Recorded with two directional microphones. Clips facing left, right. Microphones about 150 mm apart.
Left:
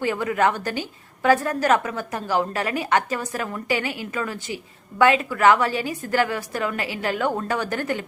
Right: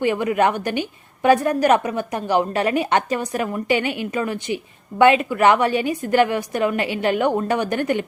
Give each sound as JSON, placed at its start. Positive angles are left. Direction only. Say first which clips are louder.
{"t": 0.0, "sound": "a woman's voice", "louder": "right 3 dB", "side_deg": -20}